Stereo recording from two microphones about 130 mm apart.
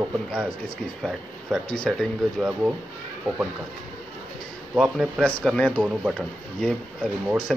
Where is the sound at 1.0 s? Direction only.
5° left (ahead or behind).